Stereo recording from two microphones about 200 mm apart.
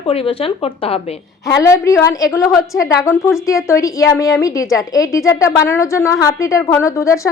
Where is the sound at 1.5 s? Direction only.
15° left (ahead or behind).